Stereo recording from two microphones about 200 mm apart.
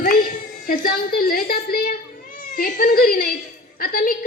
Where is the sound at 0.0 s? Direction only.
45° left (ahead or behind).